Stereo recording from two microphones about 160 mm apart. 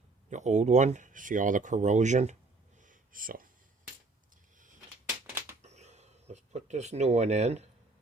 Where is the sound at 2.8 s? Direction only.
60° right (ahead or behind).